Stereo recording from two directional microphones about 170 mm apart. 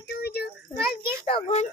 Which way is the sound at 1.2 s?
35° left (ahead or behind).